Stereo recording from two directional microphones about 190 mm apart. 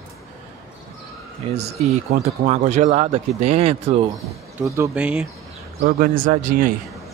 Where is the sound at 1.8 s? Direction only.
35° right (ahead or behind).